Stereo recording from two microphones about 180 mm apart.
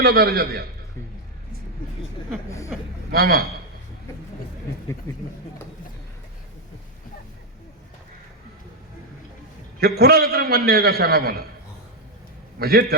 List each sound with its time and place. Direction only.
0.0 s a man's voice: 60° right (ahead or behind)
3.1 s a man's voice: 60° right (ahead or behind)
9.8 s a man's voice: 60° right (ahead or behind)
12.5 s a man's voice: 60° right (ahead or behind)